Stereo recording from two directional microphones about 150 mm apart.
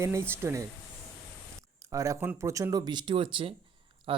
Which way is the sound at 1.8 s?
20° right (ahead or behind).